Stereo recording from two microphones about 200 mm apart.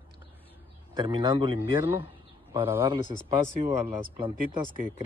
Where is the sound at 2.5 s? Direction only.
10° right (ahead or behind).